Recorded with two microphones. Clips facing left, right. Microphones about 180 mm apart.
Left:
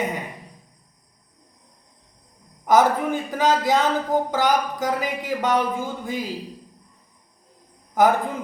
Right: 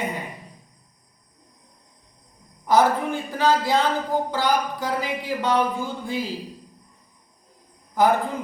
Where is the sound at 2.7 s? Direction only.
20° left (ahead or behind).